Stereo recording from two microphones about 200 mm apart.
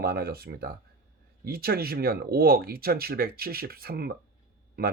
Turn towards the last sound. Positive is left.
turn(degrees=-50)  # may be behind; listen again after turning